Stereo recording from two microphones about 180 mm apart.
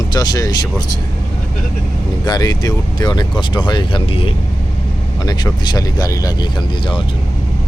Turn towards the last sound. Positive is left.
turn(degrees=20)  # may be behind; listen again after turning